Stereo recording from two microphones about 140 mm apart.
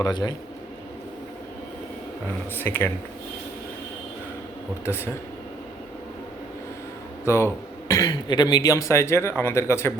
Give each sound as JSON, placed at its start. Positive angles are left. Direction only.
{"t": 0.0, "sound": "a man's voice", "side_deg": 30}
{"t": 2.6, "sound": "speech", "side_deg": 15}
{"t": 7.3, "sound": "a man's voice", "side_deg": 20}